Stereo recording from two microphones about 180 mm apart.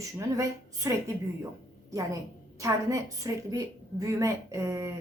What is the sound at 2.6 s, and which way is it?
A woman's voice, 20° right (ahead or behind).